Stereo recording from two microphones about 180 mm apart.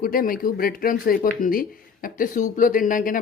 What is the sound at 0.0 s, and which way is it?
Speech, 50° left (ahead or behind).